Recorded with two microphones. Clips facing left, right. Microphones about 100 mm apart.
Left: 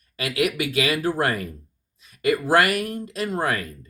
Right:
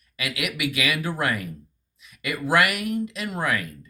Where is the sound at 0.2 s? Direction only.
35° left (ahead or behind).